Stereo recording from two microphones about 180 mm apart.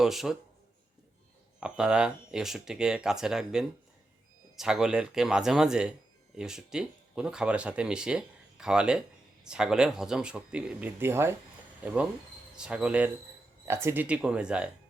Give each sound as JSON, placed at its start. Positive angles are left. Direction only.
{"t": 0.0, "sound": "speech", "side_deg": 0}
{"t": 1.5, "sound": "speech", "side_deg": -5}
{"t": 12.5, "sound": "speech", "side_deg": -5}